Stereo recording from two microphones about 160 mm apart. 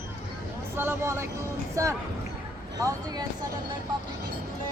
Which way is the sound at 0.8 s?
15° right (ahead or behind).